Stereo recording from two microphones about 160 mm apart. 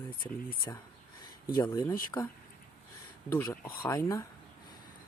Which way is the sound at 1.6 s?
10° left (ahead or behind).